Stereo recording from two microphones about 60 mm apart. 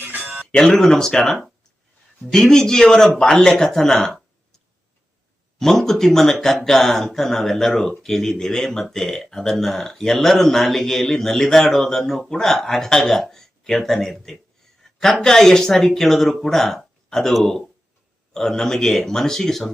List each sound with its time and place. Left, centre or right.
0.0 s a sound: right
0.6 s a man's voice: centre
5.5 s a man's voice: centre